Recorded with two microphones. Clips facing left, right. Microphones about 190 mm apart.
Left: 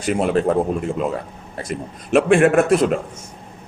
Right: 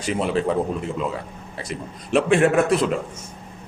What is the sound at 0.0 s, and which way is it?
A man's voice, 50° left (ahead or behind).